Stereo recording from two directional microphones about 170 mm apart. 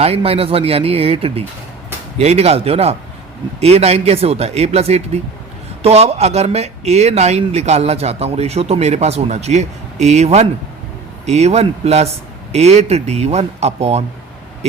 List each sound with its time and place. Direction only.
0.0 s speech: 35° right (ahead or behind)